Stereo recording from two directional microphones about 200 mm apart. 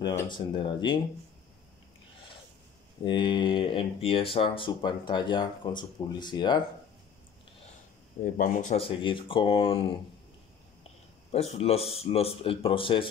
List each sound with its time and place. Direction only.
0.0 s speech: 15° left (ahead or behind)
3.0 s speech: 25° left (ahead or behind)
8.4 s speech: 40° left (ahead or behind)
11.3 s speech: 30° left (ahead or behind)